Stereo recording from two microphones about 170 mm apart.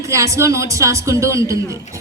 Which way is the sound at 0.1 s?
20° right (ahead or behind).